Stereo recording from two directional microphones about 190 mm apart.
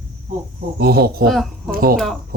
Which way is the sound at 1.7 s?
50° right (ahead or behind).